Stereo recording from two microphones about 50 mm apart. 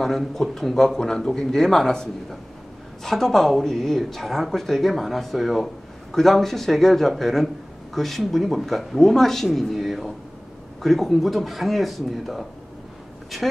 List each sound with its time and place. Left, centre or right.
0.0 s a man's voice: centre